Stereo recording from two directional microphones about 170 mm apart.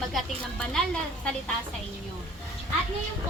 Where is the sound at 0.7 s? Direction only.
5° left (ahead or behind).